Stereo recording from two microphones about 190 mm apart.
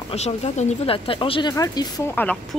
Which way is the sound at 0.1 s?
35° left (ahead or behind).